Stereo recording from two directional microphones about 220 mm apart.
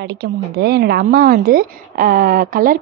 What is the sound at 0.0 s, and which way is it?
A woman's voice, 50° right (ahead or behind).